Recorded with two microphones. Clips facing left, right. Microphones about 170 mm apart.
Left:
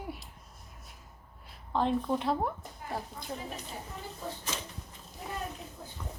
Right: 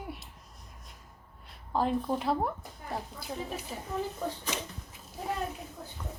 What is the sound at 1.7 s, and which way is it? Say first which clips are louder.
Speech: even; 5° right (ahead or behind).